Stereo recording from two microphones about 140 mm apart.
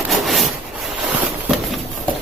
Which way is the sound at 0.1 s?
Centre (ahead or behind).